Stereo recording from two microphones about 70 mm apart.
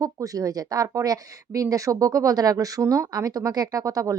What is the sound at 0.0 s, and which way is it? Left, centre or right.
Speech, right.